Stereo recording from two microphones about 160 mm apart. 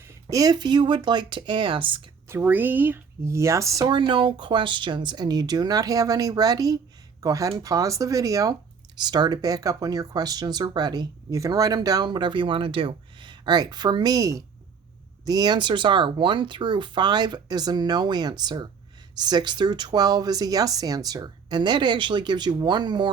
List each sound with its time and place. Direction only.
0.0 s speech: 20° right (ahead or behind)
2.3 s speech: 10° right (ahead or behind)